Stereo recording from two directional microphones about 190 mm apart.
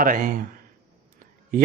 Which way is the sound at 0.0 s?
45° right (ahead or behind).